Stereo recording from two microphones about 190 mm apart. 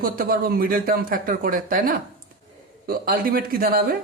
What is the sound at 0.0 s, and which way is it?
Speech, 50° right (ahead or behind).